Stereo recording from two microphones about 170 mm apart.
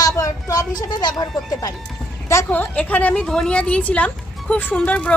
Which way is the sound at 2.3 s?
15° left (ahead or behind).